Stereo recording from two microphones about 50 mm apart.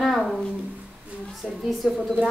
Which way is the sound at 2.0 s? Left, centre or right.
Centre.